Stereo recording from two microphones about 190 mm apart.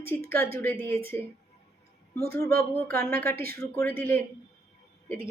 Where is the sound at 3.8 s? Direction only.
10° left (ahead or behind).